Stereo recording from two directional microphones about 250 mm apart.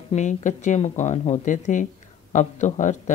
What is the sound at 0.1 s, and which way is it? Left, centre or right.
Speech, left.